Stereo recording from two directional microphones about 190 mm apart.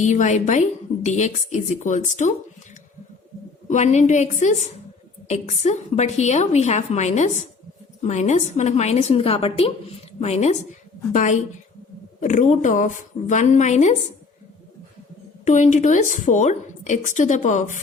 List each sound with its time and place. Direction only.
0.0 s a woman's voice: 40° left (ahead or behind)
3.7 s a woman's voice: 40° left (ahead or behind)
15.4 s a woman's voice: 40° left (ahead or behind)